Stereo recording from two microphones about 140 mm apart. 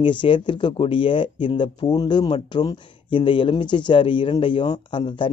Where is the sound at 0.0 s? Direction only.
35° left (ahead or behind).